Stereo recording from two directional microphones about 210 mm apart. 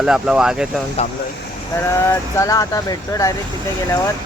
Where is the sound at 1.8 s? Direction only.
10° left (ahead or behind).